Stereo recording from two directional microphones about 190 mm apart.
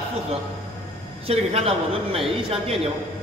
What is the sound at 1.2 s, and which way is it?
A man's voice, 30° right (ahead or behind).